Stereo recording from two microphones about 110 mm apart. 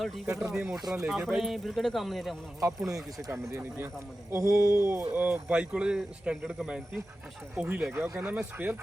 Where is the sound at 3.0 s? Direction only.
35° right (ahead or behind).